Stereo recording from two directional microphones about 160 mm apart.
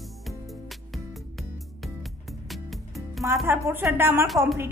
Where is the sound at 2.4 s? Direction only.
Centre (ahead or behind).